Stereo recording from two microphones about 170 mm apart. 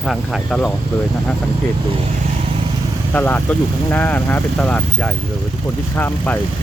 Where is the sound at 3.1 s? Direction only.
10° left (ahead or behind).